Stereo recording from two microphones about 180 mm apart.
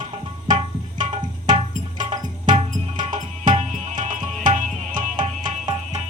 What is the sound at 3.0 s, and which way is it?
Music, 45° right (ahead or behind).